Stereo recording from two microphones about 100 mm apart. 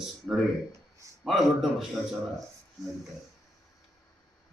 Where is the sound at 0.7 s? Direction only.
30° right (ahead or behind).